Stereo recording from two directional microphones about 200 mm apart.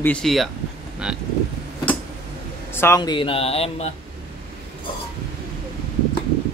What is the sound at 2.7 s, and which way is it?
Speech, 10° left (ahead or behind).